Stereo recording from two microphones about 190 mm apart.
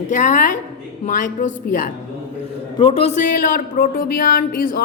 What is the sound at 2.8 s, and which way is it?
Speech, 30° left (ahead or behind).